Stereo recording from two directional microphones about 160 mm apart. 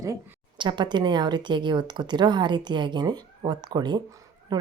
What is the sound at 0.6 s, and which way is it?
Speech, 30° right (ahead or behind).